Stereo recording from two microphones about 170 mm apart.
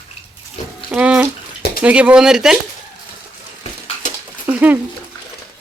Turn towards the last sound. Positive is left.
turn(degrees=-10)  # may be behind; listen again after turning